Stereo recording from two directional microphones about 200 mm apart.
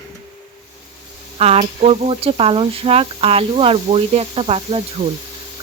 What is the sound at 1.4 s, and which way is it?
Speech, 30° right (ahead or behind).